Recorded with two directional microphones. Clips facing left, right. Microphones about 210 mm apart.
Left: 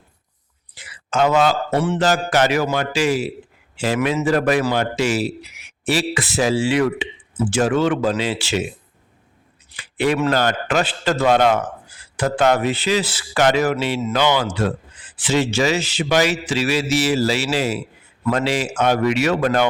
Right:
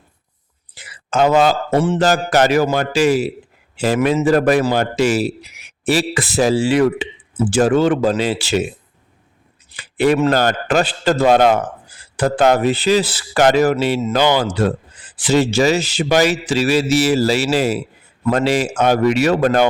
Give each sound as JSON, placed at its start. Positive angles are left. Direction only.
{"t": 0.8, "sound": "speech", "side_deg": -40}
{"t": 9.7, "sound": "a sound", "side_deg": -40}
{"t": 10.3, "sound": "speech", "side_deg": -40}